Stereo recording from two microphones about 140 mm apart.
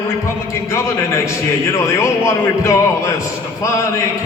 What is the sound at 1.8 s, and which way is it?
Speech, 20° left (ahead or behind).